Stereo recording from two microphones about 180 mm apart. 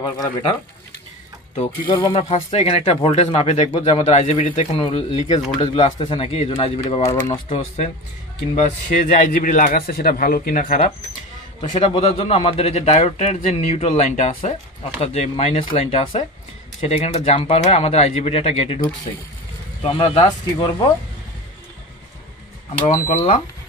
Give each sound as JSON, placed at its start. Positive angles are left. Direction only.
{"t": 0.0, "sound": "a man's voice", "side_deg": 25}
{"t": 7.1, "sound": "speech", "side_deg": 15}
{"t": 7.4, "sound": "a man's voice", "side_deg": 35}
{"t": 11.7, "sound": "a man's voice", "side_deg": 35}
{"t": 22.8, "sound": "a man's voice", "side_deg": 35}